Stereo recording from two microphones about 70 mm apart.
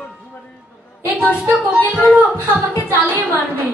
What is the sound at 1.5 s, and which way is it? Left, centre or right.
Music, centre.